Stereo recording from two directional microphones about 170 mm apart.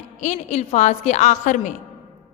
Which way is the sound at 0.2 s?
45° left (ahead or behind).